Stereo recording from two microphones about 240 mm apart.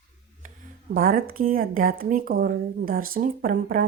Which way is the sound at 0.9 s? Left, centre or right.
Right.